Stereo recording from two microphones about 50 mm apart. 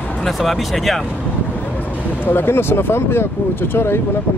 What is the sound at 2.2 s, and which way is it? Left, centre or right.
Speech, left.